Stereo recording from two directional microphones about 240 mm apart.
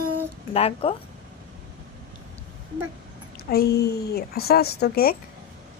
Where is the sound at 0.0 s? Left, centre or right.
Right.